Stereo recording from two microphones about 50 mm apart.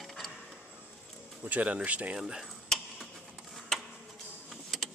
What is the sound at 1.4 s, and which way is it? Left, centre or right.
Speech, right.